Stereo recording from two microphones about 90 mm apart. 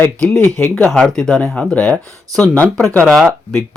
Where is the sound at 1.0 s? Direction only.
5° left (ahead or behind).